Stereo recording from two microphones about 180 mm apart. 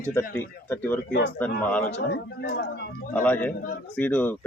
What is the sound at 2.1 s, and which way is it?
Speech, 65° left (ahead or behind).